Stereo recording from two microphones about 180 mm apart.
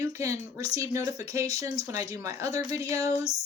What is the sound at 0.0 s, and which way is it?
Speech, 15° right (ahead or behind).